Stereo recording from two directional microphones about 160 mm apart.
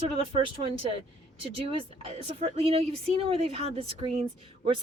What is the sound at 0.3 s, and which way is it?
Speech, 35° right (ahead or behind).